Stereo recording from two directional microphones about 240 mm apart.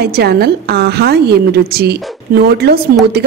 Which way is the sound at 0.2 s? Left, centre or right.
Right.